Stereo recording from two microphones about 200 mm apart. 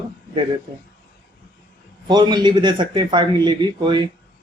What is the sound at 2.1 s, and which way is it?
Speech, 20° right (ahead or behind).